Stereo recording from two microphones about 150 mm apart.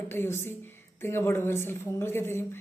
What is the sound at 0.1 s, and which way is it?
A woman's voice, 15° left (ahead or behind).